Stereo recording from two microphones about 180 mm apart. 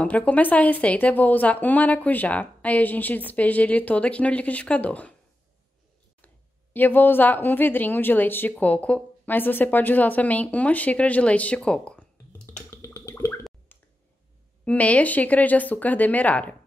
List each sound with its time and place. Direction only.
0.0 s a woman's voice: 10° left (ahead or behind)
6.2 s speech: 10° left (ahead or behind)
14.6 s a woman's voice: 5° left (ahead or behind)